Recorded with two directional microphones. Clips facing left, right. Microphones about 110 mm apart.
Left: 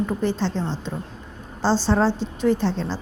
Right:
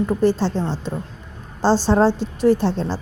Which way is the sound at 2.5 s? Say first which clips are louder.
Right 4 dB; 50° right (ahead or behind).